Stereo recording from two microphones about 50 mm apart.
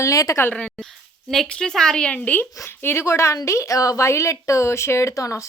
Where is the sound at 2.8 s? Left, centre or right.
Left.